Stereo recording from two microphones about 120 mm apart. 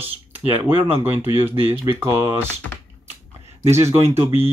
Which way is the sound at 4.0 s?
20° right (ahead or behind).